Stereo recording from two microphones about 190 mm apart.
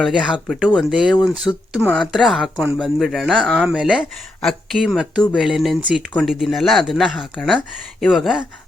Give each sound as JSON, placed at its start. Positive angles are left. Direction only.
{"t": 0.0, "sound": "speech", "side_deg": -5}